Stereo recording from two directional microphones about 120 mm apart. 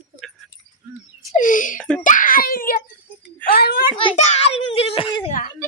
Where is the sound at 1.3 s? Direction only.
90° left.